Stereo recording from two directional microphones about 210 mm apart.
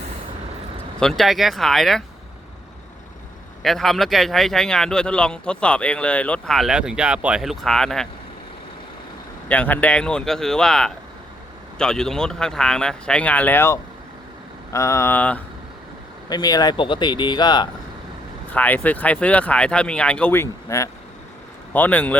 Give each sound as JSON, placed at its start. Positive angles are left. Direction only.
{"t": 0.9, "sound": "speech", "side_deg": 0}
{"t": 3.6, "sound": "speech", "side_deg": 0}
{"t": 9.5, "sound": "speech", "side_deg": 10}
{"t": 16.3, "sound": "speech", "side_deg": 20}
{"t": 18.5, "sound": "speech", "side_deg": 10}